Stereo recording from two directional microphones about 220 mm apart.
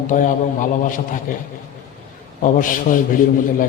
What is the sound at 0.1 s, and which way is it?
A man's voice, 35° left (ahead or behind).